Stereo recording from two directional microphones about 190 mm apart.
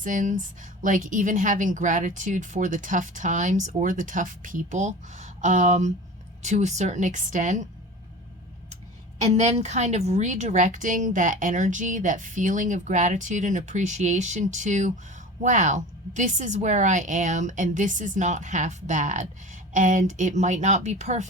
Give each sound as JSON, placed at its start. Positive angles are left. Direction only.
{"t": 0.0, "sound": "a woman's voice", "side_deg": -40}
{"t": 9.2, "sound": "a woman's voice", "side_deg": -35}